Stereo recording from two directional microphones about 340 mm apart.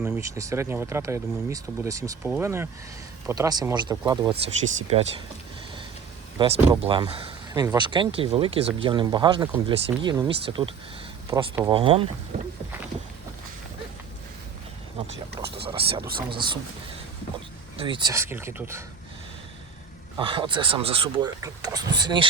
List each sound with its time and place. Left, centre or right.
0.0 s speech: centre
6.4 s speech: centre
12.3 s a sound: centre
15.6 s speech: centre
17.7 s speech: centre
20.1 s speech: centre